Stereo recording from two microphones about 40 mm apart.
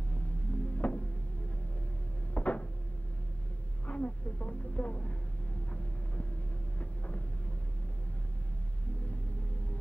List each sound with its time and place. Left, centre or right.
0.1 s music: left
2.3 s cupboard open or close: left
3.8 s a sound: left
6.8 s hum: left